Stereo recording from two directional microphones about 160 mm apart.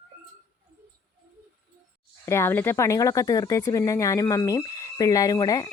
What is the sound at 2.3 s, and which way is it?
Speech, 15° left (ahead or behind).